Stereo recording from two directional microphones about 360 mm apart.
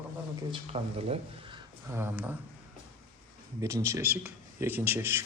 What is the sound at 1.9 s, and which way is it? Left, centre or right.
Speech, centre.